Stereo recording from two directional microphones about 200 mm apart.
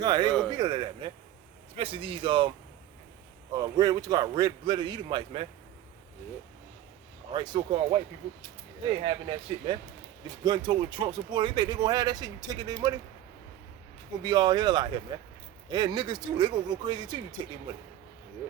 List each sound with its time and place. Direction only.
0.0 s speech: 20° right (ahead or behind)
3.5 s speech: 20° right (ahead or behind)
7.3 s speech: 25° right (ahead or behind)
14.2 s speech: 20° right (ahead or behind)